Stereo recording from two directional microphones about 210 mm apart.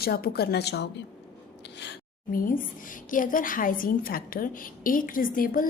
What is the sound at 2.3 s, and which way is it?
A woman's voice, 40° left (ahead or behind).